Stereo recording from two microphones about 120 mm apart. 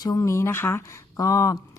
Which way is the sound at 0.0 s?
25° left (ahead or behind).